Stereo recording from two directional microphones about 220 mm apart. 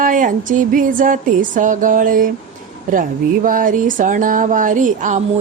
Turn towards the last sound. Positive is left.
turn(degrees=-35)  # may be behind; listen again after turning